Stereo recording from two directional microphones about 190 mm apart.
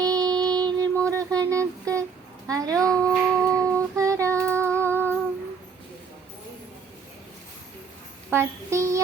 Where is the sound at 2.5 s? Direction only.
20° right (ahead or behind).